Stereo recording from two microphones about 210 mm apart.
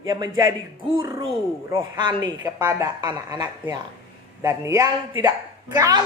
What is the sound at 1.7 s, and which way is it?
Music, 20° right (ahead or behind).